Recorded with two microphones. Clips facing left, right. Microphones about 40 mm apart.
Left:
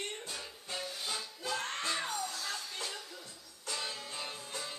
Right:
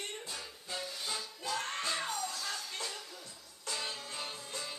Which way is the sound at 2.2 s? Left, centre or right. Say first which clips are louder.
Even; centre.